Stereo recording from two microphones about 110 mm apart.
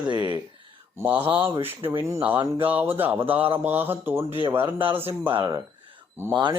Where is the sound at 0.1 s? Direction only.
45° right (ahead or behind).